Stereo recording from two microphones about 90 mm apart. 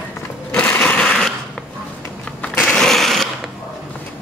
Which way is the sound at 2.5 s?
5° left (ahead or behind).